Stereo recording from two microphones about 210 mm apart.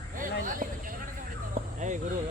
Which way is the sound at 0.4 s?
40° right (ahead or behind).